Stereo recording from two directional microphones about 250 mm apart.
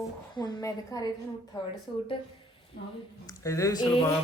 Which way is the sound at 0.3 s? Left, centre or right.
Centre.